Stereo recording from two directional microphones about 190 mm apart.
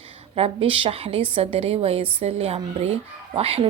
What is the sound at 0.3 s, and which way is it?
A woman's voice, 30° right (ahead or behind).